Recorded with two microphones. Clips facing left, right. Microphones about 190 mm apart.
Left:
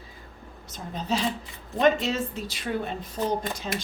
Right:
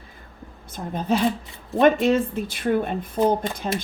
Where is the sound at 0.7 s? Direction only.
55° right (ahead or behind).